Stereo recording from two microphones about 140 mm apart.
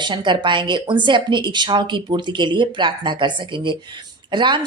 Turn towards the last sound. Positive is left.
turn(degrees=-35)  # may be behind; listen again after turning